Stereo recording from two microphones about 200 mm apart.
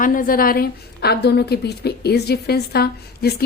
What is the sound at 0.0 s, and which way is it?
A woman's voice, 45° left (ahead or behind).